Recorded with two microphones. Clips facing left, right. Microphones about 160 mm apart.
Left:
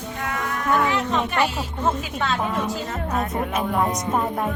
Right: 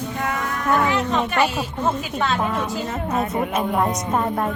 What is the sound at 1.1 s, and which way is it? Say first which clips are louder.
Speech: right 2 dB; 5° right (ahead or behind).